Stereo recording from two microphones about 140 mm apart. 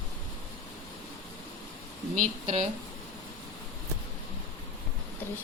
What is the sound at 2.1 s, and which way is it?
Speech, 60° right (ahead or behind).